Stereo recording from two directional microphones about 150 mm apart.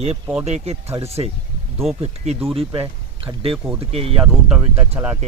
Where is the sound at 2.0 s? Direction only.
45° right (ahead or behind).